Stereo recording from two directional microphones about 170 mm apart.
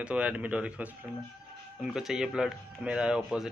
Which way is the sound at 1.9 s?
Centre (ahead or behind).